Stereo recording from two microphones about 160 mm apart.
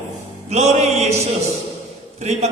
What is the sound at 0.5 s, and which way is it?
Music, 40° right (ahead or behind).